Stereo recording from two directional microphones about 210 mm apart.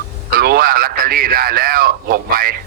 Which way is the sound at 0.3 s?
45° right (ahead or behind).